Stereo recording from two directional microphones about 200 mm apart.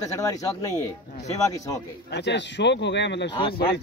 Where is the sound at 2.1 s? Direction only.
60° left (ahead or behind).